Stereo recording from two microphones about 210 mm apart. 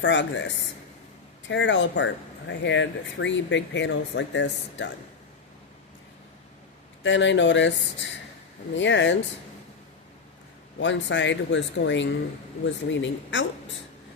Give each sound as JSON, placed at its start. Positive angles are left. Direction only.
{"t": 0.0, "sound": "speech", "side_deg": 60}
{"t": 7.0, "sound": "speech", "side_deg": 60}
{"t": 10.8, "sound": "speech", "side_deg": 60}